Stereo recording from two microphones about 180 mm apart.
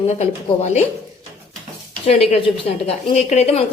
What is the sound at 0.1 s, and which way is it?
Speech, 40° left (ahead or behind).